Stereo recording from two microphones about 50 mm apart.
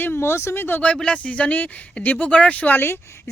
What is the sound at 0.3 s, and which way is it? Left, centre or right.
Speech, left.